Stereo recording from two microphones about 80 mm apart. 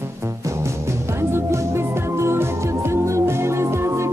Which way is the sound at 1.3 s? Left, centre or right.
Right.